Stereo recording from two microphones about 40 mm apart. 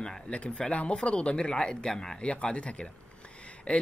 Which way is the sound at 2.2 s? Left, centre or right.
Left.